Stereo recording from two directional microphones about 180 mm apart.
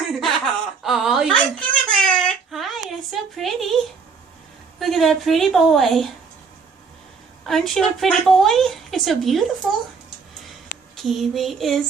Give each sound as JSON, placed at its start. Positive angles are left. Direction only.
{"t": 0.1, "sound": "a sound", "side_deg": 0}
{"t": 4.8, "sound": "a woman's voice", "side_deg": 0}
{"t": 7.4, "sound": "a woman's voice", "side_deg": 0}
{"t": 10.9, "sound": "a woman's voice", "side_deg": 0}